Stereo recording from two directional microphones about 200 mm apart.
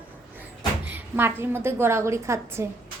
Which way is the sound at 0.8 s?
10° right (ahead or behind).